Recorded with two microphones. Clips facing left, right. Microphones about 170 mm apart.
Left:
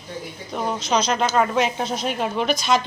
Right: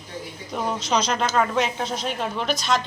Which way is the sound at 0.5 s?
5° right (ahead or behind).